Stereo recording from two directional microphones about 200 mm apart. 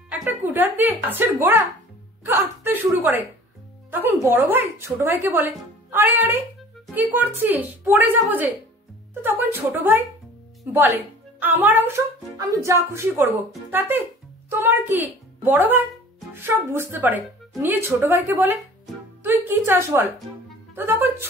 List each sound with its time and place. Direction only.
0.1 s a woman's voice: 10° right (ahead or behind)